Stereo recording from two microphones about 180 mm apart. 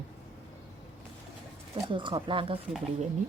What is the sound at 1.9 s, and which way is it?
Speech, 25° right (ahead or behind).